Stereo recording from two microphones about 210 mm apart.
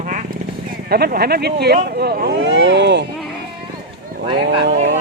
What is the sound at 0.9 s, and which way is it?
Speech, 50° right (ahead or behind).